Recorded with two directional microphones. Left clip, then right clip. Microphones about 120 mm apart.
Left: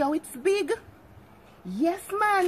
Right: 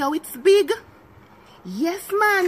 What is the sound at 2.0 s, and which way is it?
Speech, 10° left (ahead or behind).